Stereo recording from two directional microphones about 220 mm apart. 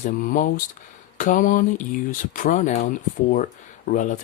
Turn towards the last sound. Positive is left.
turn(degrees=35)  # may be behind; listen again after turning